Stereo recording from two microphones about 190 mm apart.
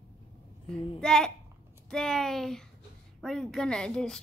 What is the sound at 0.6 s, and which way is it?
A child's voice, 5° left (ahead or behind).